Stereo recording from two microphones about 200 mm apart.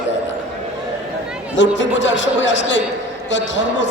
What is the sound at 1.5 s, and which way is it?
A man's voice, 65° left (ahead or behind).